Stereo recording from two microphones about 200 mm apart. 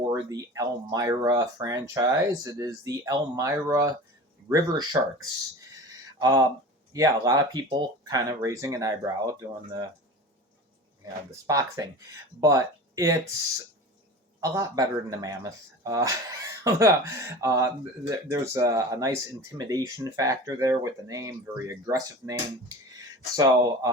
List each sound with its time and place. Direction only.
0.1 s speech: 15° right (ahead or behind)
6.1 s speech: 20° right (ahead or behind)
11.0 s speech: 15° right (ahead or behind)
14.4 s speech: 15° right (ahead or behind)